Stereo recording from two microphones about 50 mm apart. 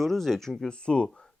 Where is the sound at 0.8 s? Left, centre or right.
Centre.